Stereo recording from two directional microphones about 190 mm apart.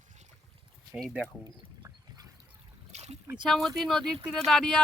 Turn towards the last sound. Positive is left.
turn(degrees=0)  # may be behind; listen again after turning